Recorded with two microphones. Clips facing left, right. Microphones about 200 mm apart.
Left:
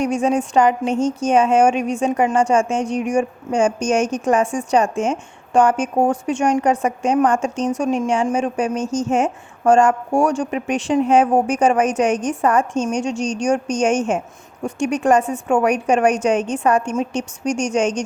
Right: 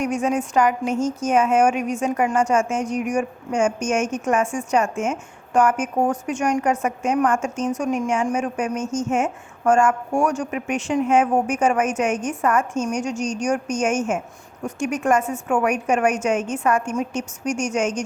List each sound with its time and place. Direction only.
0.0 s a woman's voice: 30° left (ahead or behind)